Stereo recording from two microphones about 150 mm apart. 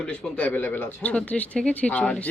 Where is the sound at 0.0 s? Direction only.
10° left (ahead or behind).